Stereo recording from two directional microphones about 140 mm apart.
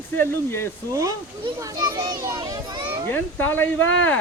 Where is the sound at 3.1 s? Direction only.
15° left (ahead or behind).